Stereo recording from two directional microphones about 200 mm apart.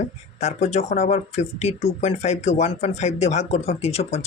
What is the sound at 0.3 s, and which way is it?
Speech, 35° left (ahead or behind).